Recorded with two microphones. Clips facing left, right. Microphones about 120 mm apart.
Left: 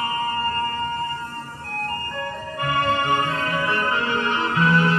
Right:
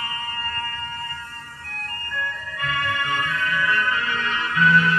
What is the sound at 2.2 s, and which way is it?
Music, 35° left (ahead or behind).